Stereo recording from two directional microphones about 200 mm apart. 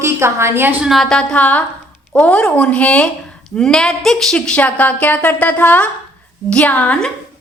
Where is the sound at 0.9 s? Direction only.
Centre (ahead or behind).